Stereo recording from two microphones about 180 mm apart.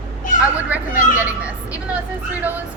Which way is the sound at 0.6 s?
10° right (ahead or behind).